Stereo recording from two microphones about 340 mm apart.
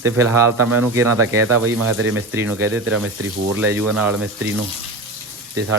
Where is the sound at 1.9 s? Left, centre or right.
Right.